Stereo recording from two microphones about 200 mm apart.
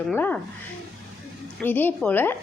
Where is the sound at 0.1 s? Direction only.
10° left (ahead or behind).